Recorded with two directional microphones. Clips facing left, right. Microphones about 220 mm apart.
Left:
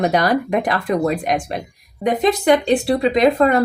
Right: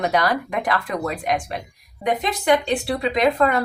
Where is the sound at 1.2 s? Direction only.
20° left (ahead or behind).